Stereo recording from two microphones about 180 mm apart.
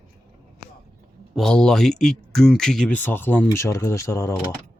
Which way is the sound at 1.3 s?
5° left (ahead or behind).